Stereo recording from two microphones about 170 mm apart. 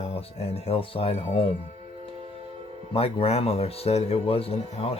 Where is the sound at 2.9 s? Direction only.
35° left (ahead or behind).